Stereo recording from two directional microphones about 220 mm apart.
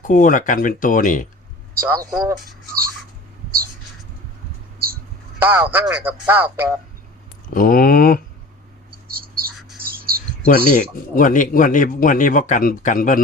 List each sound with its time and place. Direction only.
0.0 s a man's voice: 35° left (ahead or behind)
1.8 s speech: 15° right (ahead or behind)
5.4 s speech: 10° right (ahead or behind)
7.5 s a man's voice: 40° left (ahead or behind)
9.0 s a sound: 40° right (ahead or behind)
9.8 s bird: 40° right (ahead or behind)
10.4 s a man's voice: 40° left (ahead or behind)